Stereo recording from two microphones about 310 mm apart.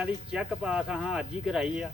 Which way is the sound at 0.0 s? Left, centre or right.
Centre.